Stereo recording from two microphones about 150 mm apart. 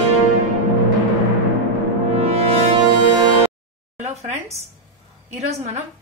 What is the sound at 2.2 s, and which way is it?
Music, 45° right (ahead or behind).